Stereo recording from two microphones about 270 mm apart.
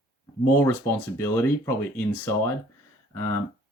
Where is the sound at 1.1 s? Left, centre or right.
Centre.